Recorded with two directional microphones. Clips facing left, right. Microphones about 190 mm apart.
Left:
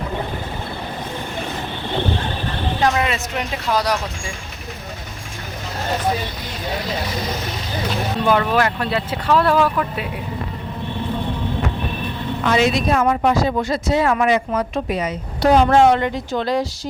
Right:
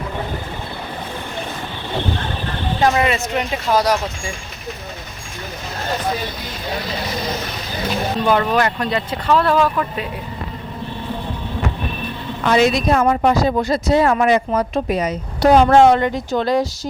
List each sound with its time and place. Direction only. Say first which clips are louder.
2.8 s speech: right 3 dB; 5° right (ahead or behind)
8.3 s speech: even; centre (ahead or behind)
12.5 s speech: right 2 dB; 40° right (ahead or behind)